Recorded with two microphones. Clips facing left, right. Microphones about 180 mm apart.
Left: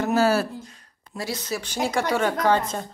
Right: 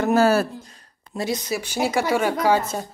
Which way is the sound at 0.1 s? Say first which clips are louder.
Right 3 dB; 50° right (ahead or behind).